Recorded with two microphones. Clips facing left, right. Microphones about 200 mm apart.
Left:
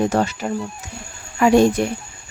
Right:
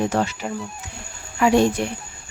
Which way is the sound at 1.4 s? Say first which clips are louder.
Left 3 dB; 45° left (ahead or behind).